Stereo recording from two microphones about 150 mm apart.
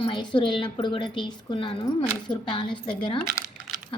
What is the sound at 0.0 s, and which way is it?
A woman's voice, 30° left (ahead or behind).